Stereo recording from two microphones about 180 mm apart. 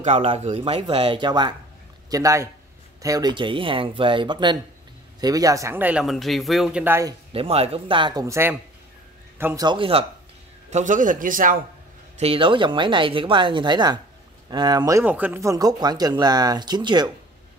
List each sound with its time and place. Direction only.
0.0 s speech: 40° right (ahead or behind); by 7.2 s 15° right (ahead or behind)
7.3 s speech: 35° right (ahead or behind); by 9.7 s 10° right (ahead or behind)
9.7 s speech: 30° right (ahead or behind)
10.7 s a man's voice: 45° right (ahead or behind)
12.2 s speech: 30° right (ahead or behind)